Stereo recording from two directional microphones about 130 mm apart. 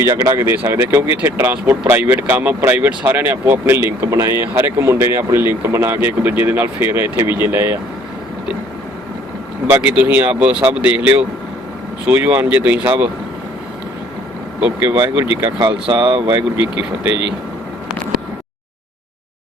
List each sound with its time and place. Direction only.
0.0 s speech: 20° right (ahead or behind)
9.6 s speech: 15° right (ahead or behind)
14.6 s speech: 10° right (ahead or behind)